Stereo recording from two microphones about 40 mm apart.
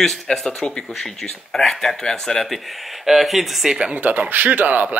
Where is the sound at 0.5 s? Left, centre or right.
Left.